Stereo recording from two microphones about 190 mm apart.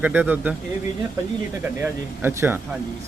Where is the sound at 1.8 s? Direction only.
10° right (ahead or behind).